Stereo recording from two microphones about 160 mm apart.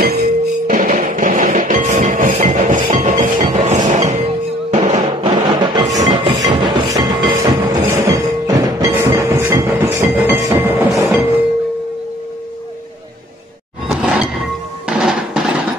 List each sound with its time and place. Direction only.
0.0 s music: 75° right (ahead or behind); by 2.8 s 50° right (ahead or behind)
2.9 s train: 55° right (ahead or behind)
3.9 s music: 50° right (ahead or behind)
5.5 s music: 30° right (ahead or behind)
5.9 s train: 25° right (ahead or behind)
7.8 s music: 15° right (ahead or behind)
13.8 s a sound: 5° right (ahead or behind)
14.9 s music: 5° right (ahead or behind)